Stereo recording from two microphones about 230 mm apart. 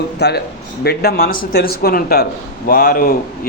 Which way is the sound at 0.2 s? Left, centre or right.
Left.